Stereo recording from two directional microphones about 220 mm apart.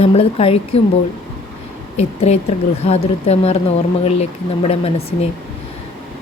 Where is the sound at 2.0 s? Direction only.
30° left (ahead or behind).